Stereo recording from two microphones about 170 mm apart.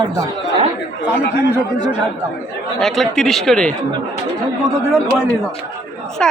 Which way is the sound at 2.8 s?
Centre (ahead or behind).